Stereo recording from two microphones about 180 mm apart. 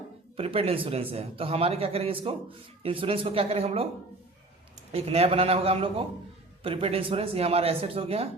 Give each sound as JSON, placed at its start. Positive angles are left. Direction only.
{"t": 0.3, "sound": "a man's voice", "side_deg": -30}
{"t": 4.9, "sound": "a man's voice", "side_deg": -35}